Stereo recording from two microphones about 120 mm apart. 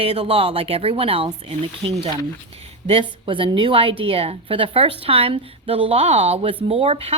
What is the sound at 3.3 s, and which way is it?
A woman's voice, 45° right (ahead or behind).